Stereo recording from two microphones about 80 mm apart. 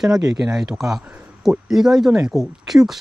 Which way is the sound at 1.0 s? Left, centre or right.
Right.